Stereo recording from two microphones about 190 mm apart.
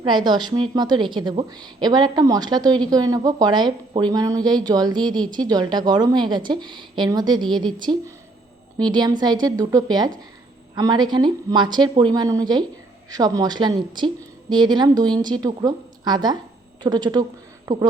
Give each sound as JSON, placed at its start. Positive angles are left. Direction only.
{"t": 0.0, "sound": "a woman's voice", "side_deg": -25}